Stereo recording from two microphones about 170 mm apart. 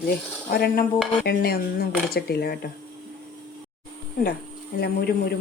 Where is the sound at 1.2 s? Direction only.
65° left (ahead or behind).